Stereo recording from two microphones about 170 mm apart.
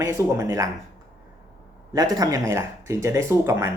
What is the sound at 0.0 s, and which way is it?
Speech, 15° right (ahead or behind).